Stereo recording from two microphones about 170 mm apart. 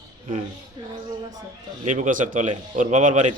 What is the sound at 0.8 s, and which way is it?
Speech, 30° right (ahead or behind).